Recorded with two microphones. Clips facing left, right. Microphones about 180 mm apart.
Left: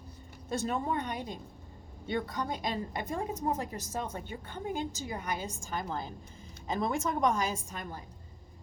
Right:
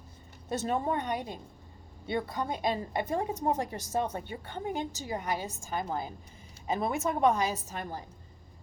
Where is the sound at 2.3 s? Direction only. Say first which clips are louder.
Right 3 dB; 20° right (ahead or behind).